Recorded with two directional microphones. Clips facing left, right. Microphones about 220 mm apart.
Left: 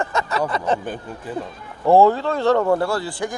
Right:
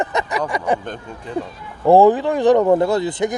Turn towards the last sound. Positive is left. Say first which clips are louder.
# right 5 dB
turn(degrees=-20)  # may be behind; listen again after turning